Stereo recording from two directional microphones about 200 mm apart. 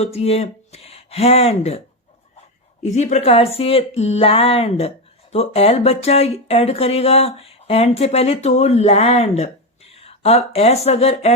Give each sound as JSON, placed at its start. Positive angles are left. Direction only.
{"t": 0.0, "sound": "speech", "side_deg": 30}
{"t": 2.8, "sound": "speech", "side_deg": 35}